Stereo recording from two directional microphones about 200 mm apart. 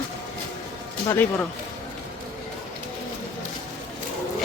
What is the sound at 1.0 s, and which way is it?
Speech, 10° left (ahead or behind).